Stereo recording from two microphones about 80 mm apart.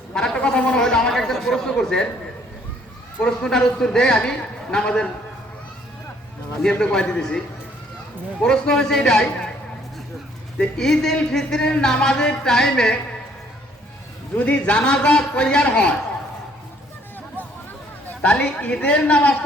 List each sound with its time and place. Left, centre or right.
0.1 s a sound: centre
3.2 s speech: centre
6.6 s speech: centre
10.6 s speech: centre
14.3 s speech: centre
18.2 s speech: centre